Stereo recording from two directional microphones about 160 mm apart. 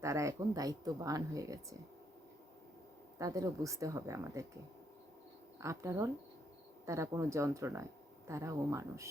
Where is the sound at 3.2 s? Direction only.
20° right (ahead or behind).